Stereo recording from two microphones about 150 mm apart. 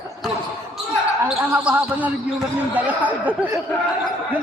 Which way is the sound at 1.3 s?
10° right (ahead or behind).